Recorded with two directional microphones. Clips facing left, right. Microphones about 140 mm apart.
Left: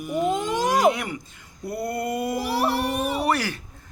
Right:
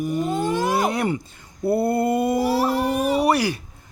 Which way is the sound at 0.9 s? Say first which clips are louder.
Right 7 dB; 35° right (ahead or behind).